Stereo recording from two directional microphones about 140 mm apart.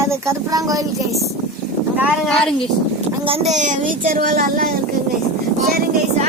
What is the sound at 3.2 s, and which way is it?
Speech, 45° right (ahead or behind).